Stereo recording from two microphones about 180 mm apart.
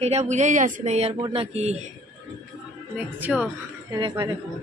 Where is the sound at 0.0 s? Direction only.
35° right (ahead or behind).